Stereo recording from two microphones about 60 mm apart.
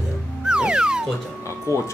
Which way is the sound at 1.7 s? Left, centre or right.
Left.